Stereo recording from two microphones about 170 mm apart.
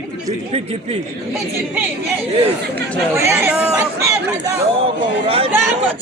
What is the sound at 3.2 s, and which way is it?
A woman's voice, 15° right (ahead or behind).